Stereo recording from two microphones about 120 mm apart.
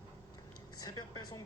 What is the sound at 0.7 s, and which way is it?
Speech, 30° left (ahead or behind).